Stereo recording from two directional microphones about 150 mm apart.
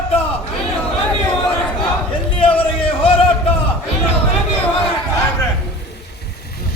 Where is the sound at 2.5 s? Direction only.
35° left (ahead or behind).